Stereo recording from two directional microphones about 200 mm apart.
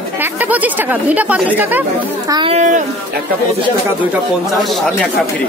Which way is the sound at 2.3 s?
20° right (ahead or behind).